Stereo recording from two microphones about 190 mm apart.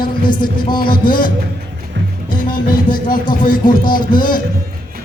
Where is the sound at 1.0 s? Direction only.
25° left (ahead or behind).